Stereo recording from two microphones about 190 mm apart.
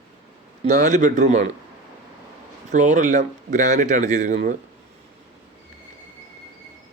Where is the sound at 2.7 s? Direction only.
40° right (ahead or behind).